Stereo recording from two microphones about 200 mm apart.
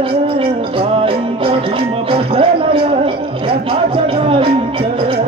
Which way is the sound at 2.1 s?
25° right (ahead or behind).